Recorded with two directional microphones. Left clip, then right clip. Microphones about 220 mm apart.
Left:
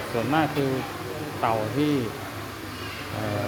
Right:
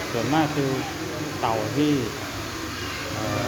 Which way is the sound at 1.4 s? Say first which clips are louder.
Even; 20° left (ahead or behind).